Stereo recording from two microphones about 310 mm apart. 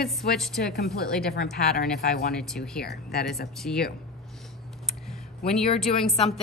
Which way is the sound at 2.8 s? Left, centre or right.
Left.